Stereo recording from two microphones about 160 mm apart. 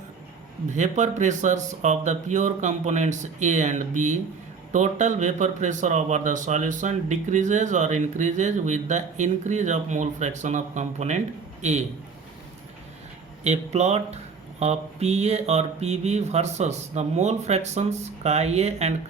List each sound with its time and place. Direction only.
0.7 s speech: 50° right (ahead or behind)
13.4 s speech: 45° right (ahead or behind)